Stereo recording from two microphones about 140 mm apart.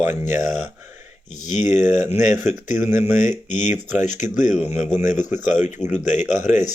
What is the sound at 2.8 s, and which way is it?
Speech, 15° right (ahead or behind).